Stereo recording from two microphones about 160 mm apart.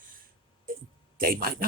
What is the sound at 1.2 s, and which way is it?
Speech, 65° right (ahead or behind).